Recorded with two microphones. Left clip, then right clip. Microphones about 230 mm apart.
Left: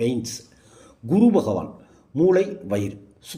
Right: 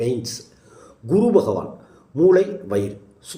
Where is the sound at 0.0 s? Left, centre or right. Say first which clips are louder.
Right 1 dB; left.